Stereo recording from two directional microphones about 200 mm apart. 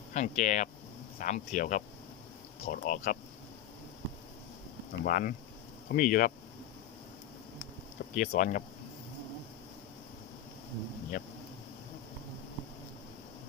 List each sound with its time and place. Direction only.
0.1 s speech: 35° left (ahead or behind)
4.9 s speech: 45° left (ahead or behind)
8.1 s speech: 40° left (ahead or behind)
11.1 s speech: 45° left (ahead or behind)